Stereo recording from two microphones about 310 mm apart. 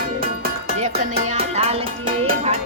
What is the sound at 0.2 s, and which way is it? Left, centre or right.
Music, right.